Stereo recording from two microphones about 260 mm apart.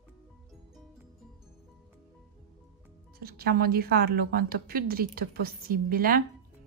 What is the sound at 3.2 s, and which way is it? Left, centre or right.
A woman's voice, right.